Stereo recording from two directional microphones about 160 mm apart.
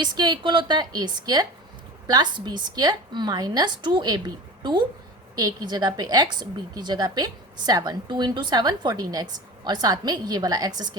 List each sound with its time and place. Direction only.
0.0 s a woman's voice: 25° right (ahead or behind)
5.4 s a woman's voice: 25° right (ahead or behind)